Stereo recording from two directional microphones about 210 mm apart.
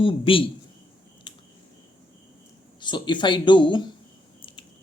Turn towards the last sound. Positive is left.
turn(degrees=25)  # may be behind; listen again after turning